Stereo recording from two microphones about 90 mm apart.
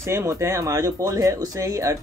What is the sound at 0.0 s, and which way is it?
Speech, 30° right (ahead or behind).